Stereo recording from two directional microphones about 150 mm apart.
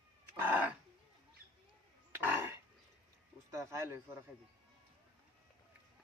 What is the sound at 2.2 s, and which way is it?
Dog, 15° right (ahead or behind).